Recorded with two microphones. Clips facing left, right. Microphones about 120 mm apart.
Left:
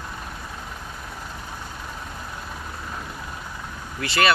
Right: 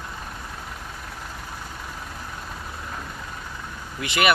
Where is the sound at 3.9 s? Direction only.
15° right (ahead or behind).